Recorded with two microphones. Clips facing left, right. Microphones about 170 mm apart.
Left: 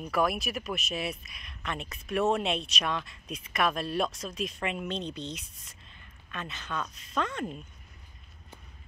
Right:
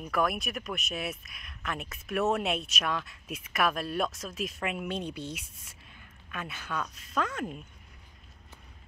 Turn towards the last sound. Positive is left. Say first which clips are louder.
# even
turn(degrees=-5)  # may be behind; listen again after turning